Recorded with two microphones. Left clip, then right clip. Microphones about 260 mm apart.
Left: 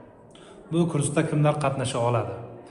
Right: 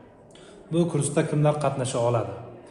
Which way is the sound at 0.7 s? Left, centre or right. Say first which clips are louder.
Right 1 dB; left.